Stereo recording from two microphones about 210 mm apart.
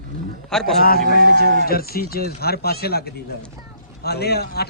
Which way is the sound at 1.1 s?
45° left (ahead or behind).